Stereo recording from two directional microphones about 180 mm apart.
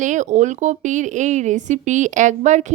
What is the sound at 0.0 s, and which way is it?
Speech, 45° right (ahead or behind).